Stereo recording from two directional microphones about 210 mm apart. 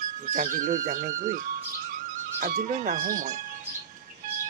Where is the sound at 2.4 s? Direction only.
40° right (ahead or behind).